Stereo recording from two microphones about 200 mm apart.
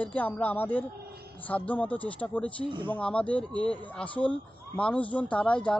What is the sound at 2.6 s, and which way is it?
Speech, 25° right (ahead or behind).